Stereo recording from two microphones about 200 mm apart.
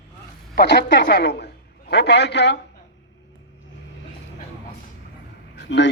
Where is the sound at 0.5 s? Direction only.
55° left (ahead or behind).